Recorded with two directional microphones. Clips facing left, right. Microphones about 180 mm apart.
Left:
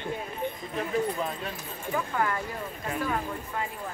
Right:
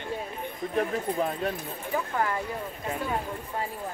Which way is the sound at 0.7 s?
55° right (ahead or behind).